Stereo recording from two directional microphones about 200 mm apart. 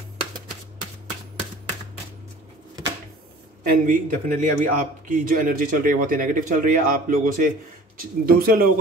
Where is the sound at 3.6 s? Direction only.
45° right (ahead or behind).